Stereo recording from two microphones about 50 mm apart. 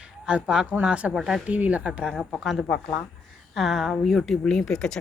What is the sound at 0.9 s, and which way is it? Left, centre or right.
Speech, right.